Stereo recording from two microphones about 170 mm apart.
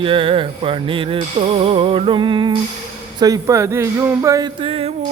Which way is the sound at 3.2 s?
20° right (ahead or behind).